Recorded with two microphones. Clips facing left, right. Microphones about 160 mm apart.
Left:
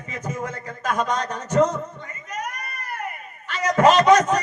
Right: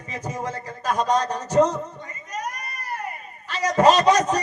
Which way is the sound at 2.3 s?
35° right (ahead or behind).